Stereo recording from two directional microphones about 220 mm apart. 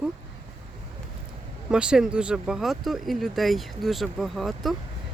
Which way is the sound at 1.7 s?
5° right (ahead or behind).